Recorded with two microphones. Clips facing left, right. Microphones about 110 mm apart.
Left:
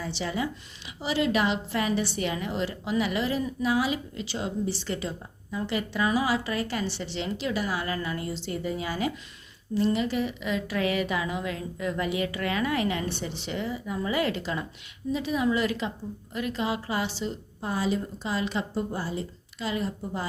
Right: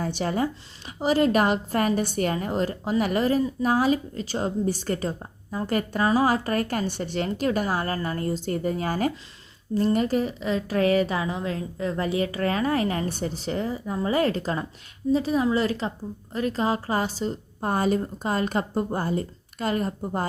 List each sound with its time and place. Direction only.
0.0 s a woman's voice: 50° right (ahead or behind)